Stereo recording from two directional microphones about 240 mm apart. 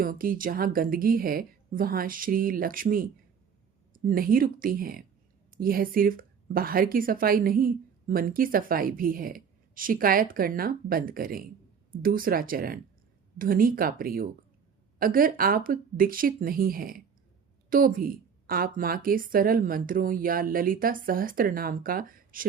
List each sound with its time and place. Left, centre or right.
0.0 s a woman's voice: right